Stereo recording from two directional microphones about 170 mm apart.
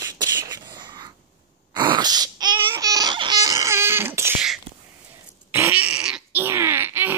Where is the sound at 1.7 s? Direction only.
25° right (ahead or behind).